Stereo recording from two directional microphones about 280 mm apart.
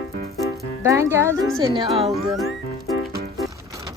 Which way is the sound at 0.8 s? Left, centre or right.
Centre.